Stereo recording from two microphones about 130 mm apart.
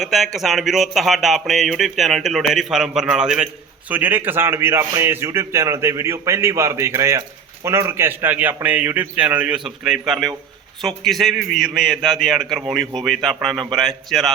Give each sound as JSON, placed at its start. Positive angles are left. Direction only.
{"t": 0.0, "sound": "a man's voice", "side_deg": 0}